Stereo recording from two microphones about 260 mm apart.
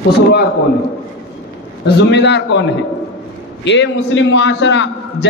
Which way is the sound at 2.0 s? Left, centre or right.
Left.